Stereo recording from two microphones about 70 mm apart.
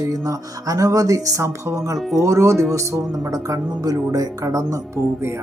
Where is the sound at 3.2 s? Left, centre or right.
Right.